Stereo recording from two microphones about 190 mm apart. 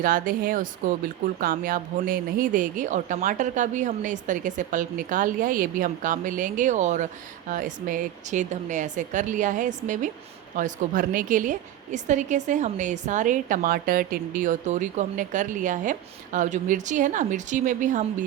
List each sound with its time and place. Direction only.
0.0 s a woman's voice: 45° right (ahead or behind)